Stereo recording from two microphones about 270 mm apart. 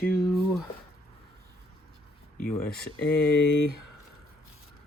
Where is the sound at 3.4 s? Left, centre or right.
Left.